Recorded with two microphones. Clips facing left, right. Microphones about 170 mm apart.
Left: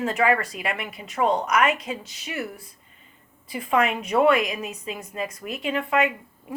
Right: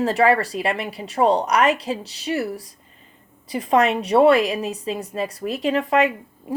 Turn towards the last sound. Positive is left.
turn(degrees=-35)  # may be behind; listen again after turning